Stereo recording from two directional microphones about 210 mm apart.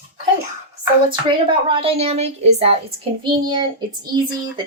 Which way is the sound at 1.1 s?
25° right (ahead or behind).